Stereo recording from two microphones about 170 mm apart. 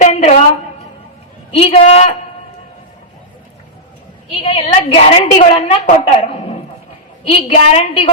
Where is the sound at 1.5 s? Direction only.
35° left (ahead or behind).